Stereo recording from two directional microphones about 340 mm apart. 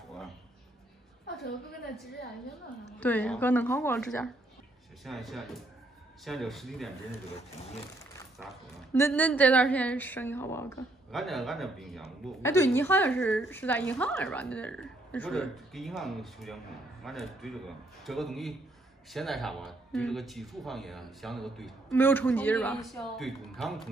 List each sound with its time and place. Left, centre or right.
1.4 s a woman's voice: left
3.0 s a woman's voice: centre
7.5 s speech: centre
8.4 s a woman's voice: centre